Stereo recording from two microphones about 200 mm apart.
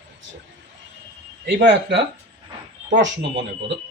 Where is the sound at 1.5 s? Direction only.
60° right (ahead or behind).